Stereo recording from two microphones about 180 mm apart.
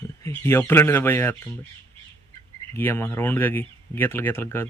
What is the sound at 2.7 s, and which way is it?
Speech, 10° left (ahead or behind).